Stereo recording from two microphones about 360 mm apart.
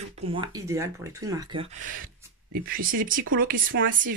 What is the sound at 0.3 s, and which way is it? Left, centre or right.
Speech, centre.